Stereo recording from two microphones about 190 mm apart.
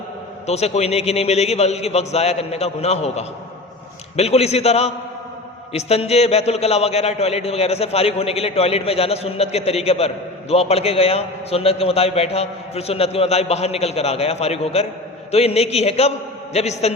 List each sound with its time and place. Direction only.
0.4 s a man's voice: 35° left (ahead or behind)